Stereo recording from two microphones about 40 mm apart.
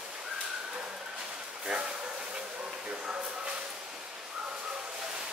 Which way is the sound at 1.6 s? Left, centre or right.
Right.